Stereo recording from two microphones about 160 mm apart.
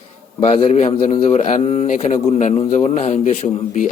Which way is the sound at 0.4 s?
45° left (ahead or behind).